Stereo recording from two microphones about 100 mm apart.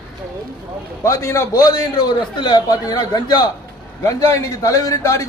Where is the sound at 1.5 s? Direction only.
40° left (ahead or behind).